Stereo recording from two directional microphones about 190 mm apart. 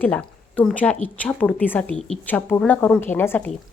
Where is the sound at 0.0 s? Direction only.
5° left (ahead or behind).